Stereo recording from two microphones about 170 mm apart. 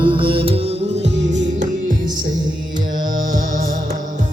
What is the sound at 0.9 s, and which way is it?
Music, 90° right.